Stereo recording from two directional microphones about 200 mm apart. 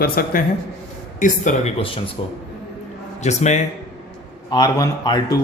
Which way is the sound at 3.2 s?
35° left (ahead or behind).